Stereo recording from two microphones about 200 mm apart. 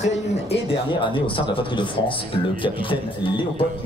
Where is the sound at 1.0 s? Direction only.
25° left (ahead or behind).